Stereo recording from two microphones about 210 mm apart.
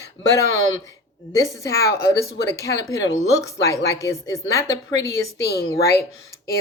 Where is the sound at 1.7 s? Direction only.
50° left (ahead or behind).